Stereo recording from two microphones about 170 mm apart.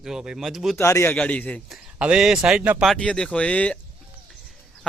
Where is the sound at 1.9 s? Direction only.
5° right (ahead or behind).